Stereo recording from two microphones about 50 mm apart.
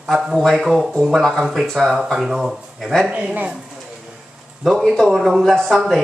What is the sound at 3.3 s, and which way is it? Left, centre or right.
Speech, right.